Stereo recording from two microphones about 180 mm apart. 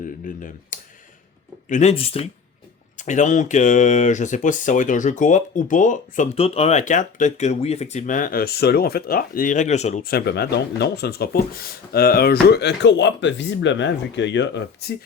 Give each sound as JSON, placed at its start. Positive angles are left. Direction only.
{"t": 0.0, "sound": "speech", "side_deg": 50}
{"t": 6.3, "sound": "speech", "side_deg": 35}
{"t": 10.0, "sound": "speech", "side_deg": 55}